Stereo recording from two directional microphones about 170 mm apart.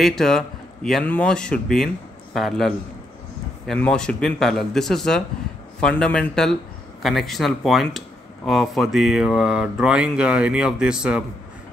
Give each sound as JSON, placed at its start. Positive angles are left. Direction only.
{"t": 0.0, "sound": "speech", "side_deg": 0}